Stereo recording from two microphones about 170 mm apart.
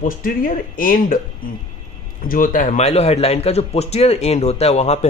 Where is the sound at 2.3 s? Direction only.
50° left (ahead or behind).